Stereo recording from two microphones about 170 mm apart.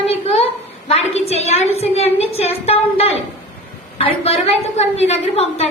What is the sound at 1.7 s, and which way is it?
A woman's voice, 40° left (ahead or behind).